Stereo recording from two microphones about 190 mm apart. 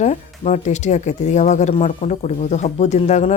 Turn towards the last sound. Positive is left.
turn(degrees=35)  # may be behind; listen again after turning